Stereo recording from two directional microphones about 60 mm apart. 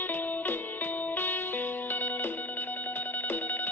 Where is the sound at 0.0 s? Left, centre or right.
Left.